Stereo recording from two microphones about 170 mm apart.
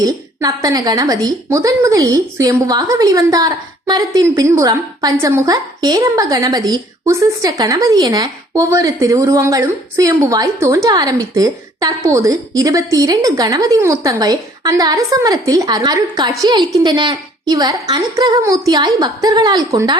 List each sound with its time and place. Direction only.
0.0 s a woman's voice: 20° right (ahead or behind)